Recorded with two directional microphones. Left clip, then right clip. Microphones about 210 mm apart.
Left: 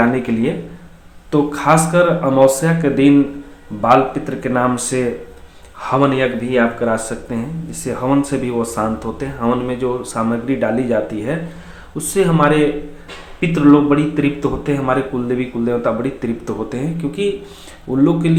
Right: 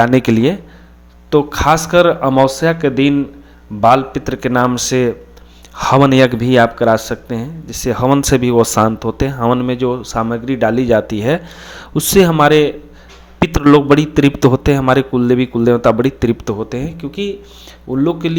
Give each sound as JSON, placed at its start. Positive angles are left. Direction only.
{"t": 0.0, "sound": "speech", "side_deg": -50}